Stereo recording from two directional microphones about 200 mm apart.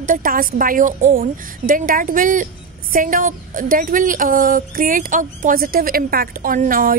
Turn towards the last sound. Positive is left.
turn(degrees=-45)  # may be behind; listen again after turning